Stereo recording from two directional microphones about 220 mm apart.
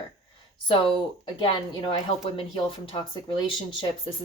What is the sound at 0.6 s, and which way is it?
A woman's voice, 25° left (ahead or behind).